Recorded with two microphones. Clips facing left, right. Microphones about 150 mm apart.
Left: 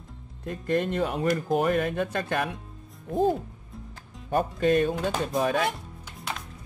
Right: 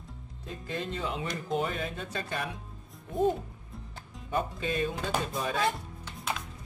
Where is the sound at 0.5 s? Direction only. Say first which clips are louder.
Left 9 dB; 55° left (ahead or behind).